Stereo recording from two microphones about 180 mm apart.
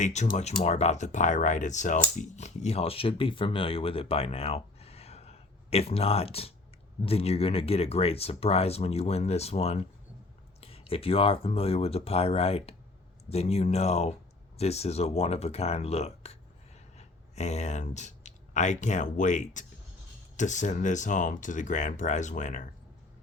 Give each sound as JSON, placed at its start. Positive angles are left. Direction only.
{"t": 0.0, "sound": "speech", "side_deg": 40}